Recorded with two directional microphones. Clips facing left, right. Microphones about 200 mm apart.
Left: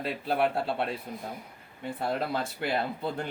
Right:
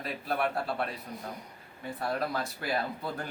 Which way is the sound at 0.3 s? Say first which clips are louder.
Left 3 dB; 30° left (ahead or behind).